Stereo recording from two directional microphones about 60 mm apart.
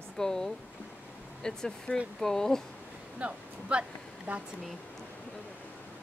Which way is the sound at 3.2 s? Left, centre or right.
Right.